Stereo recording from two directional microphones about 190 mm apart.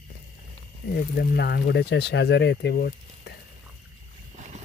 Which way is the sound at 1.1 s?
55° left (ahead or behind).